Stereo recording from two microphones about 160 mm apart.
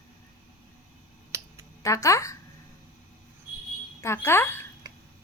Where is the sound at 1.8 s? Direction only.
20° left (ahead or behind).